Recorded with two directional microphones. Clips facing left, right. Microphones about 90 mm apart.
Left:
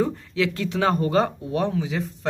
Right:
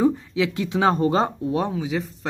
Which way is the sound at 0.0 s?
15° right (ahead or behind).